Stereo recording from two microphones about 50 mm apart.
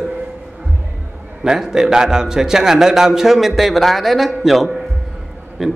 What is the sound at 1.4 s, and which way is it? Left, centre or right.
A man's voice, centre.